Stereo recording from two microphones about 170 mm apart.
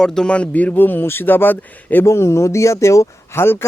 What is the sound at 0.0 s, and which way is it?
Speech, 5° left (ahead or behind).